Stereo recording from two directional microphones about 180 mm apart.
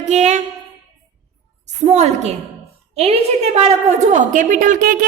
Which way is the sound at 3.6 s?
35° right (ahead or behind).